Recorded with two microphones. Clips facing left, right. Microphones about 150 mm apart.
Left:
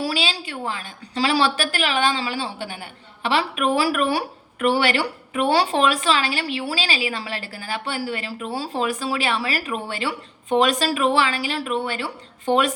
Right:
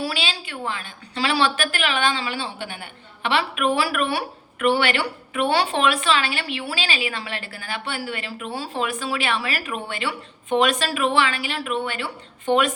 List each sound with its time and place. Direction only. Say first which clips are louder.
0.0 s a woman's voice: left 3 dB; 40° left (ahead or behind)